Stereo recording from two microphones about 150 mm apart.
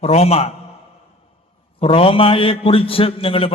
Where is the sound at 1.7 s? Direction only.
40° left (ahead or behind).